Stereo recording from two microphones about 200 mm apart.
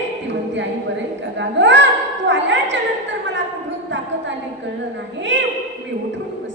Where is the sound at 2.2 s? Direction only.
65° right (ahead or behind).